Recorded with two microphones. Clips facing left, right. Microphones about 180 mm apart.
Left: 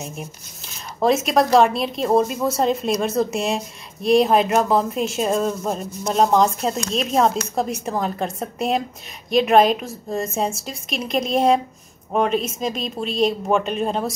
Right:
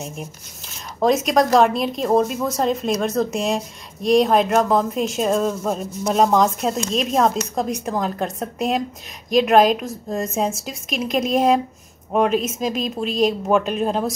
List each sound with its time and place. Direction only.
0.9 s a woman's voice: centre (ahead or behind)